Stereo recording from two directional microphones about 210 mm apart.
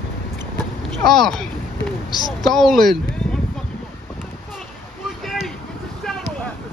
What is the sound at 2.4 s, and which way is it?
Speech, centre (ahead or behind).